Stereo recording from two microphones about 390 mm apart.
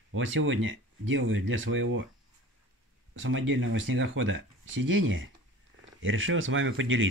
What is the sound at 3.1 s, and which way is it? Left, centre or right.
Speech, right.